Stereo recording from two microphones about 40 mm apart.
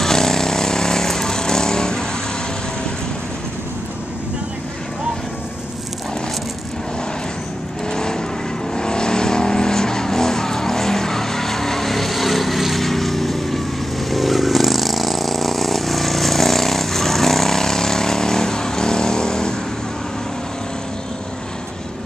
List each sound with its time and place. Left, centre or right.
0.0 s vehicle: centre
7.9 s vehicle: centre